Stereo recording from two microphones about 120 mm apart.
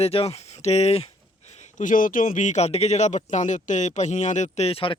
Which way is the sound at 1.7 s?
90° left.